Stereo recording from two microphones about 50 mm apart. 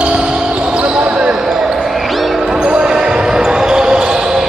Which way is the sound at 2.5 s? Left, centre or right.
Centre.